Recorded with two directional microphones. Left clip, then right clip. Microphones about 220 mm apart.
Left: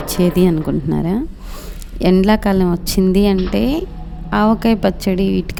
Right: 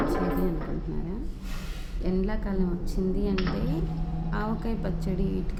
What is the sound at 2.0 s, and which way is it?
A woman's voice, 45° left (ahead or behind).